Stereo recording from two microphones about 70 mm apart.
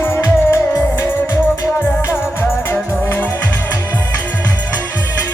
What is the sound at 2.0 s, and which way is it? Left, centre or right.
Music, left.